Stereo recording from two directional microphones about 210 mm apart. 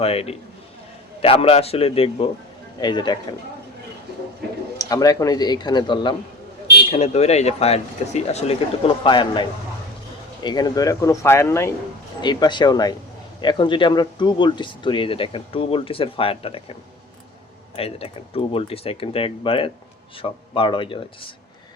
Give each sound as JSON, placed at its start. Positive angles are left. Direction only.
{"t": 0.0, "sound": "speech", "side_deg": 30}
{"t": 4.8, "sound": "speech", "side_deg": 15}
{"t": 17.7, "sound": "speech", "side_deg": 30}